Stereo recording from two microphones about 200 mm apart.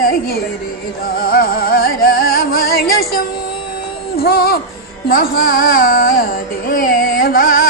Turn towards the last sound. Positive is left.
turn(degrees=45)  # may be behind; listen again after turning